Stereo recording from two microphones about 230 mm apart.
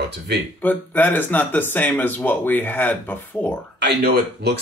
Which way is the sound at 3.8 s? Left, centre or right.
Right.